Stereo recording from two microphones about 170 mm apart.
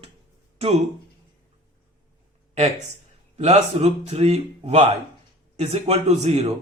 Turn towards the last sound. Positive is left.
turn(degrees=-40)  # may be behind; listen again after turning